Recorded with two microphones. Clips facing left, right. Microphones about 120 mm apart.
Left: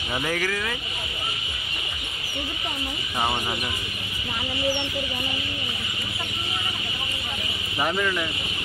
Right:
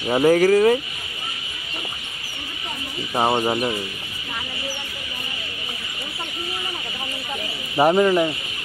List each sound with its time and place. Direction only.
0.1 s speech: 35° right (ahead or behind)
3.2 s speech: 35° right (ahead or behind)
7.7 s speech: 40° right (ahead or behind)